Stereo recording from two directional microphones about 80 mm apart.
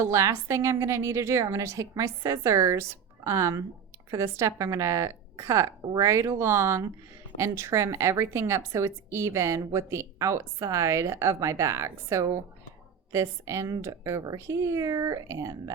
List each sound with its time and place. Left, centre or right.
0.0 s speech: right